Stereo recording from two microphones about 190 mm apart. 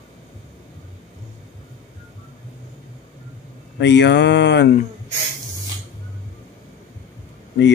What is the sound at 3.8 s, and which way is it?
Speech, 65° left (ahead or behind).